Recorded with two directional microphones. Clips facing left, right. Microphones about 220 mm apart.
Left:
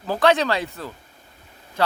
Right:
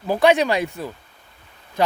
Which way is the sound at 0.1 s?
15° right (ahead or behind).